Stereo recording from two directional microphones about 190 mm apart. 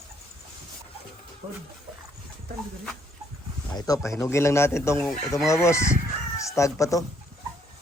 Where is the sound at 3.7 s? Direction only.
20° left (ahead or behind).